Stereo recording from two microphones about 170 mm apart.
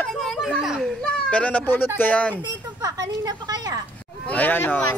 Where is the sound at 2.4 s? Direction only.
25° right (ahead or behind).